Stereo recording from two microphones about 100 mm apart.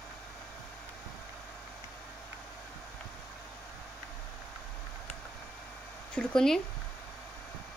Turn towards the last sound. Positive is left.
turn(degrees=5)  # may be behind; listen again after turning